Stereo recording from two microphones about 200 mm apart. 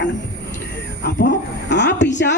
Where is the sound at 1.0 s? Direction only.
60° left (ahead or behind).